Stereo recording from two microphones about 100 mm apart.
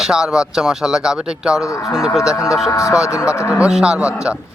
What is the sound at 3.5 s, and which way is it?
Speech, 10° right (ahead or behind).